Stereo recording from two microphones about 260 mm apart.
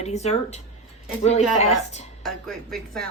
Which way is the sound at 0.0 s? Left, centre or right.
Left.